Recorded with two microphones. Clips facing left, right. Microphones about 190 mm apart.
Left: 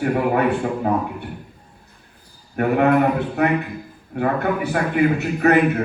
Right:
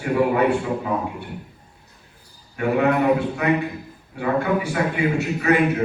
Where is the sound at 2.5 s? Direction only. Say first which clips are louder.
Left 3 dB; 55° left (ahead or behind).